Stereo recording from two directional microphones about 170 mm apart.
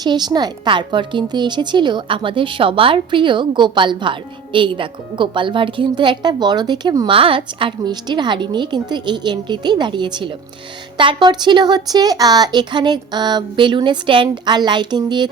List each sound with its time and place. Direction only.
0.0 s a woman's voice: 25° right (ahead or behind)